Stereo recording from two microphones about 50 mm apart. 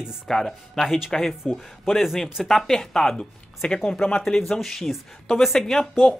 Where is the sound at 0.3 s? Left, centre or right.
Centre.